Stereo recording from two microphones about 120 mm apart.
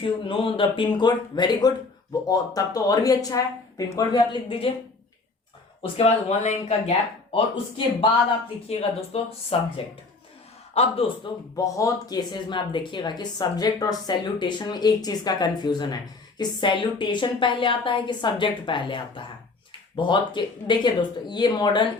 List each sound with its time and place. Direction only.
0.0 s a woman's voice: 45° left (ahead or behind)
4.4 s a woman's voice: 50° left (ahead or behind)
5.8 s speech: 60° left (ahead or behind)
8.6 s a woman's voice: 55° left (ahead or behind)
11.5 s a woman's voice: 25° left (ahead or behind)